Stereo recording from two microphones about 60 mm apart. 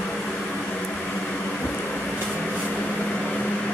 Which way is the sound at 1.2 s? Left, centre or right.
Left.